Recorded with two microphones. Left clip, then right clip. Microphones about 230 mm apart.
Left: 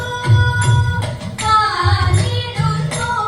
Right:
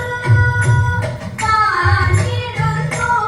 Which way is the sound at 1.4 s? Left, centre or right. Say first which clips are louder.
Even; left.